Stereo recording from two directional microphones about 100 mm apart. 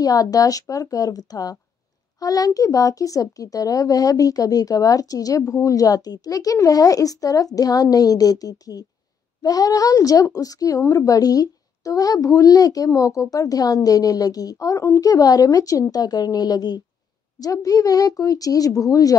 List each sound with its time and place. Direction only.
0.0 s a woman's voice: 35° left (ahead or behind)